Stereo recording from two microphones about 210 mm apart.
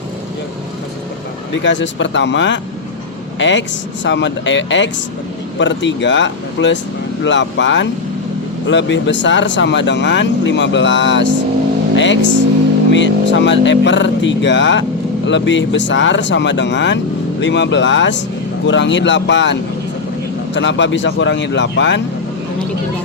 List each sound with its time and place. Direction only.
1.5 s speech: 60° left (ahead or behind)